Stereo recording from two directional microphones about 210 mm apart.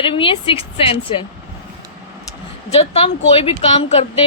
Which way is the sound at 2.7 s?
30° left (ahead or behind).